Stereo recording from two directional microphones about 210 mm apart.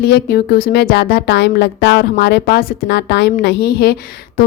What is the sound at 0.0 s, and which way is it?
A woman's voice, 50° left (ahead or behind).